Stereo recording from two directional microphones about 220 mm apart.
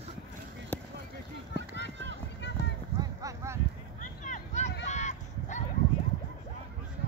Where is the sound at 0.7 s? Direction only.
10° left (ahead or behind).